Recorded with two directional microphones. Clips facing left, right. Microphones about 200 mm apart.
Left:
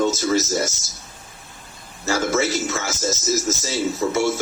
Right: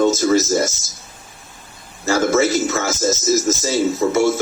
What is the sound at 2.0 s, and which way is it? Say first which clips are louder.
Speech: right 5 dB; 50° right (ahead or behind).